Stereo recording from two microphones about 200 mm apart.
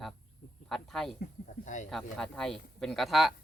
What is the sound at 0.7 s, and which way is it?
Speech, centre (ahead or behind).